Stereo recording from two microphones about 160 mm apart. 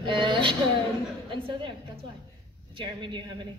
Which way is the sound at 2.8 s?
30° right (ahead or behind).